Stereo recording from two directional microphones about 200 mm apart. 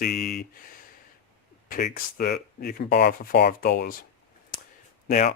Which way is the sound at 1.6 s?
45° left (ahead or behind).